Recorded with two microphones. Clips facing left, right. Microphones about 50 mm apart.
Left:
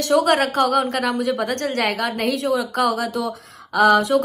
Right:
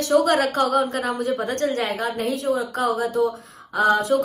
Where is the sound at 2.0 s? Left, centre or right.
Left.